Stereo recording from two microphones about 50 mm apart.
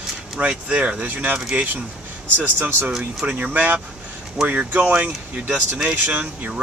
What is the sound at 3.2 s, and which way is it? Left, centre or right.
Speech, right.